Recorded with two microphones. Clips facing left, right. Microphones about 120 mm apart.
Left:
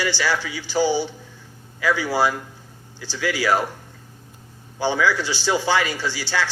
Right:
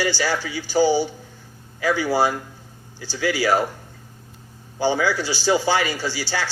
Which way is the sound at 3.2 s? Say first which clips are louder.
Right 2 dB; 30° right (ahead or behind).